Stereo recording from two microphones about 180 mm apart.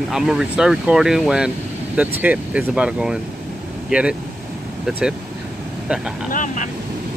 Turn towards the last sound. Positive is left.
turn(degrees=45)  # may be behind; listen again after turning